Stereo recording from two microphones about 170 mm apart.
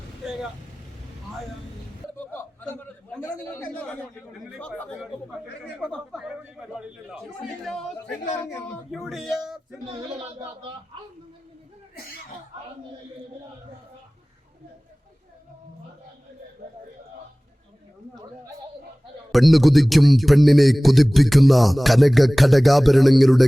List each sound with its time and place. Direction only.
2.1 s a sound: 10° left (ahead or behind)
3.8 s a man's voice: 5° left (ahead or behind)
5.8 s a man's voice: 5° left (ahead or behind)
8.9 s a man's voice: centre (ahead or behind)
9.8 s speech: 35° right (ahead or behind)
19.3 s a man's voice: centre (ahead or behind)